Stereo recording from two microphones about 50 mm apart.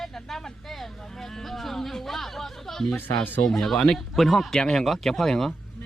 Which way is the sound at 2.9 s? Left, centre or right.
Left.